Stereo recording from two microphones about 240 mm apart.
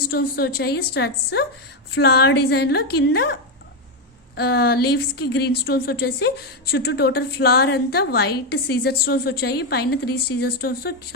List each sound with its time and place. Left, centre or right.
0.1 s a woman's voice: left
4.4 s speech: left